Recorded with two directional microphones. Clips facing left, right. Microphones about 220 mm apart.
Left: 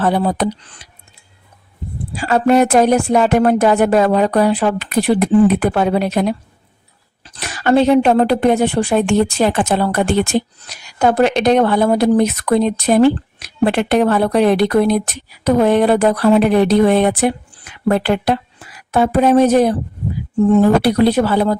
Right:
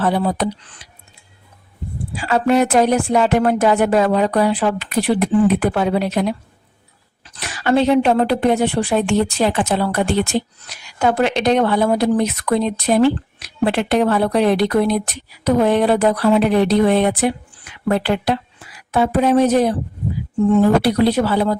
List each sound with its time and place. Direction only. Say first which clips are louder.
0.0 s speech: left 2 dB; 50° left (ahead or behind)
2.1 s speech: left 3 dB; 45° left (ahead or behind)